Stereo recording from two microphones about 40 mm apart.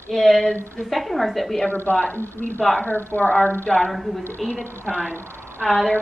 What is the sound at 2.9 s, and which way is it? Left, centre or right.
Speech, left.